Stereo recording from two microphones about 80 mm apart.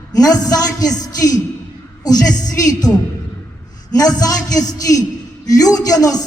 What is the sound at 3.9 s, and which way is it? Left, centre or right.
A man's voice, left.